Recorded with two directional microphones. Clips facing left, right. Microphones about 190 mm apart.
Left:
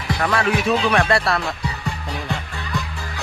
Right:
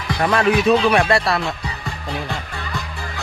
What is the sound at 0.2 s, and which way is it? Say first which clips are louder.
Speech: right 4 dB; 20° right (ahead or behind).